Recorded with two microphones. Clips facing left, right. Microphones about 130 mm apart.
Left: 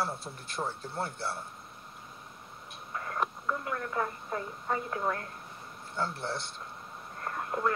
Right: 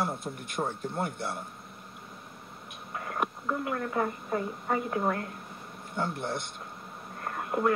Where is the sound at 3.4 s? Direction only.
35° right (ahead or behind).